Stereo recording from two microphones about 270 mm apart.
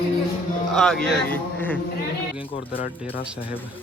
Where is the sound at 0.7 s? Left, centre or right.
Centre.